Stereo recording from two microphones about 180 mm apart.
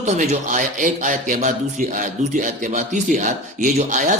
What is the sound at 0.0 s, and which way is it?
A man's voice, 45° right (ahead or behind).